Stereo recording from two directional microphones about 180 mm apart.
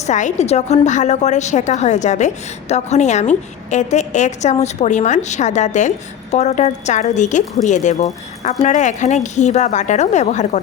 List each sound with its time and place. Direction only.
0.0 s a woman's voice: 40° left (ahead or behind)